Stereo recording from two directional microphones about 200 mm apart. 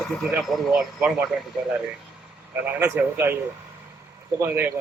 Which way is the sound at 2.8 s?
10° right (ahead or behind).